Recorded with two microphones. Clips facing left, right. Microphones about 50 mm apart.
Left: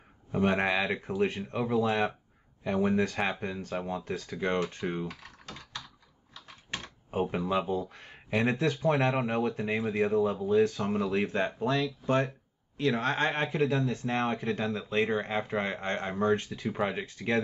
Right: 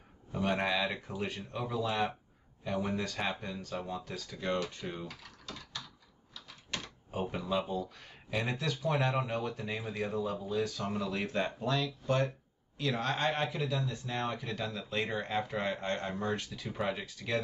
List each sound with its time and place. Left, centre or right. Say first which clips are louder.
0.3 s speech: left 5 dB; left
6.3 s typewriter: left 2 dB; left
6.8 s speech: left 7 dB; left
10.8 s speech: left 6 dB; left